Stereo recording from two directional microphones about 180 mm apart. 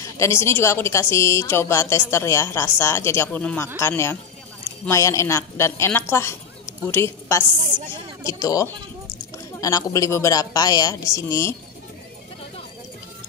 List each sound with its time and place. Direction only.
0.0 s a woman's voice: 15° left (ahead or behind)